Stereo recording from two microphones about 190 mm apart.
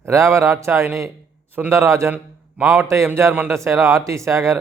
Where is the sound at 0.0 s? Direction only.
15° right (ahead or behind).